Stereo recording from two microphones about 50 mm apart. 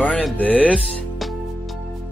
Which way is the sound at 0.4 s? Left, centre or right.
Left.